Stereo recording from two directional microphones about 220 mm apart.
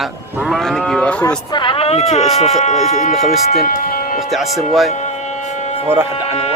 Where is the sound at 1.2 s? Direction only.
20° left (ahead or behind); by 3.9 s 40° left (ahead or behind).